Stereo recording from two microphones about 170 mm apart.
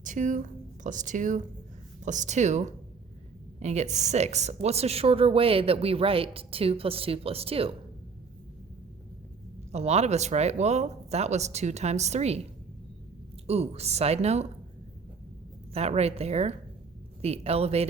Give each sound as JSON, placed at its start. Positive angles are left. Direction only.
{"t": 0.0, "sound": "a woman's voice", "side_deg": -50}
{"t": 9.7, "sound": "a woman's voice", "side_deg": -40}
{"t": 13.5, "sound": "a woman's voice", "side_deg": -40}
{"t": 15.7, "sound": "a woman's voice", "side_deg": -35}